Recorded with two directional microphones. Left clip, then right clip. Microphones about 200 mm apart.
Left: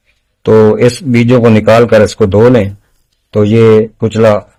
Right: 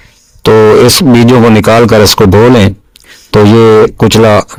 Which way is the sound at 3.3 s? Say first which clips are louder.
Right 3 dB; 50° right (ahead or behind).